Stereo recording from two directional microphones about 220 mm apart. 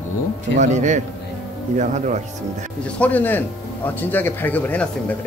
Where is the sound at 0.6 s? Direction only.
35° right (ahead or behind).